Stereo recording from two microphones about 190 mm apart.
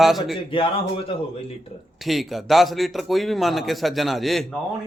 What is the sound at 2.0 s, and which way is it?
A man's voice, centre (ahead or behind).